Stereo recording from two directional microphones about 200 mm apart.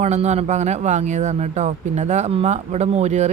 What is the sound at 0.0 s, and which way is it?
Speech, 35° right (ahead or behind).